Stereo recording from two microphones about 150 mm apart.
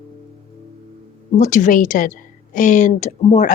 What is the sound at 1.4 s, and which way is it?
A woman's voice, 55° left (ahead or behind).